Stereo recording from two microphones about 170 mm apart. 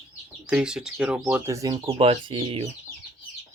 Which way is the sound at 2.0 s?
30° right (ahead or behind).